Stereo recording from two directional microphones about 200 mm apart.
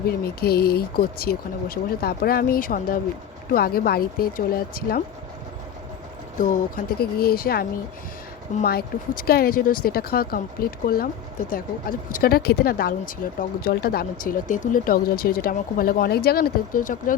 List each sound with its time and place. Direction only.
0.3 s speech: 50° left (ahead or behind)
6.4 s speech: 45° left (ahead or behind)